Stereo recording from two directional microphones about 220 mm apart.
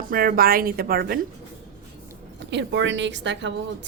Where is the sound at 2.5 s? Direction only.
55° right (ahead or behind).